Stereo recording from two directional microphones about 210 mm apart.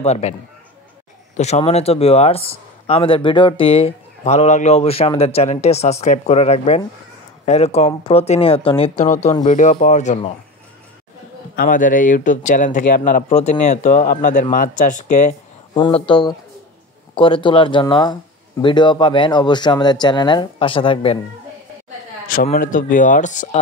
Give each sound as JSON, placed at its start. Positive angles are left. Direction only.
{"t": 0.0, "sound": "speech", "side_deg": 30}
{"t": 11.5, "sound": "speech", "side_deg": 40}
{"t": 15.7, "sound": "speech", "side_deg": 20}
{"t": 22.3, "sound": "speech", "side_deg": 45}